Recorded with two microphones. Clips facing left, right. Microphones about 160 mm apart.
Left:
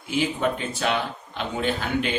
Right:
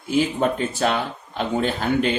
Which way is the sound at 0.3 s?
45° right (ahead or behind).